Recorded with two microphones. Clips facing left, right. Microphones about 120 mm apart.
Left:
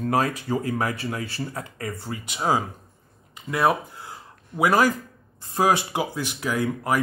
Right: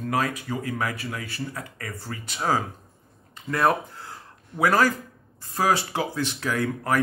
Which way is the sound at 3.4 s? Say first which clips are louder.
Even; 5° left (ahead or behind).